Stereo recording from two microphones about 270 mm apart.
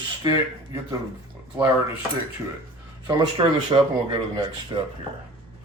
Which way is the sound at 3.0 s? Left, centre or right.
Centre.